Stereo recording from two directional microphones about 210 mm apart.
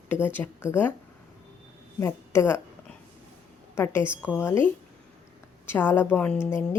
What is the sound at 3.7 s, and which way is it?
A woman's voice, 10° left (ahead or behind).